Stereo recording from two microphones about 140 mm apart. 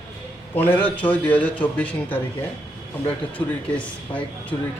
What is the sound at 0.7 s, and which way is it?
A man's voice, 10° left (ahead or behind).